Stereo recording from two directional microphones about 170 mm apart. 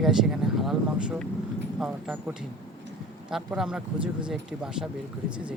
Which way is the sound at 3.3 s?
5° right (ahead or behind).